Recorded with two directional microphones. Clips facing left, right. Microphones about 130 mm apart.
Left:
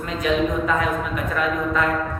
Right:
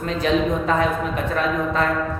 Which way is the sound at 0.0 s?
30° right (ahead or behind).